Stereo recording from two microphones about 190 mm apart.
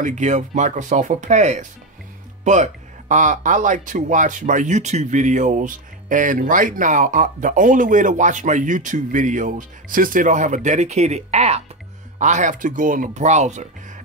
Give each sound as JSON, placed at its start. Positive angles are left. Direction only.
{"t": 0.0, "sound": "speech", "side_deg": -40}